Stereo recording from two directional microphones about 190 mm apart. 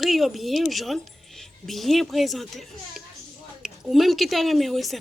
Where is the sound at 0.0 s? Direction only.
Centre (ahead or behind).